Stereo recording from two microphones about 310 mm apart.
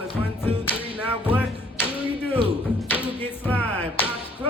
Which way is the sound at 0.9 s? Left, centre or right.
Centre.